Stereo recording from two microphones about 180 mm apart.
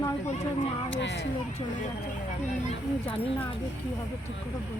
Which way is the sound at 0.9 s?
75° left (ahead or behind).